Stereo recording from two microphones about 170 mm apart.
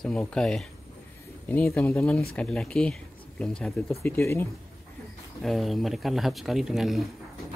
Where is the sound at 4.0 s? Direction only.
15° left (ahead or behind).